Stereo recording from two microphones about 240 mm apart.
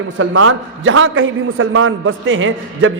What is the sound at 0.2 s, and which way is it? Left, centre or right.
A man's voice, right.